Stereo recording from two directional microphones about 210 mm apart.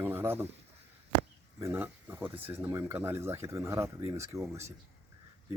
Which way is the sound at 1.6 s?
10° right (ahead or behind).